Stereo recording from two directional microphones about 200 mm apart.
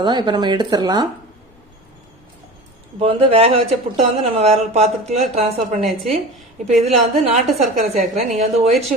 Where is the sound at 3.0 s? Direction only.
25° right (ahead or behind).